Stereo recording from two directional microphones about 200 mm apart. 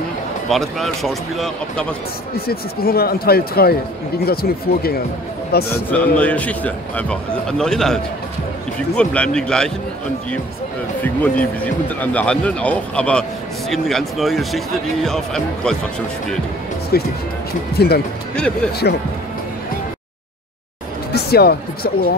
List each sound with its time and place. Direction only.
0.5 s speech: centre (ahead or behind)
2.3 s speech: 50° left (ahead or behind)
5.9 s speech: 5° left (ahead or behind)
11.6 s speech: 5° left (ahead or behind)
16.9 s speech: 50° left (ahead or behind)
18.3 s speech: 5° left (ahead or behind)
18.7 s speech: 55° left (ahead or behind)
21.1 s speech: 50° left (ahead or behind)